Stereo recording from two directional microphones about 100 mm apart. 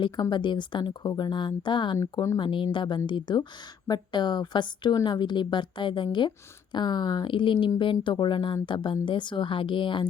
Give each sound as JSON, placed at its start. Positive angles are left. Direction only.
{"t": 0.0, "sound": "a woman's voice", "side_deg": 50}